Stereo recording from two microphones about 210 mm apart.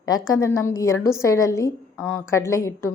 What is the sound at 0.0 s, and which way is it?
A woman's voice, 15° left (ahead or behind).